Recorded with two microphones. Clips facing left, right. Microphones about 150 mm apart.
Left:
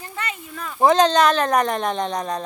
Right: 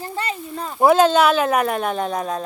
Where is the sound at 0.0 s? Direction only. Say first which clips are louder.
Right 5 dB; 30° right (ahead or behind).